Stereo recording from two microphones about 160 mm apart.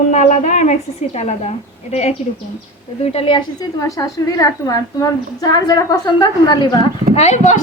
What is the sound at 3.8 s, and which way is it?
A child's voice, 20° left (ahead or behind).